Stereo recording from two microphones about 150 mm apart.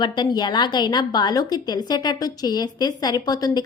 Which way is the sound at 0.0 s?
30° left (ahead or behind).